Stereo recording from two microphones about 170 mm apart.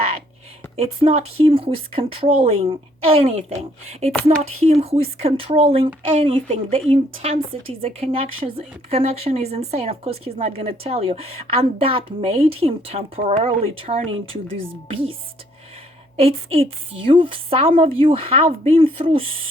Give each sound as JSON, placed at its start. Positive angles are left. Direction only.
{"t": 0.8, "sound": "a woman's voice", "side_deg": -35}
{"t": 16.1, "sound": "a woman's voice", "side_deg": -35}